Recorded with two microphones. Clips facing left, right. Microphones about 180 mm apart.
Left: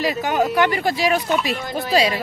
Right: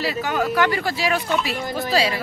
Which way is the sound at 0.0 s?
15° left (ahead or behind).